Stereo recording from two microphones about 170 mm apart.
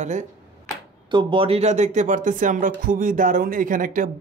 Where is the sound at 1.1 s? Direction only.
30° right (ahead or behind).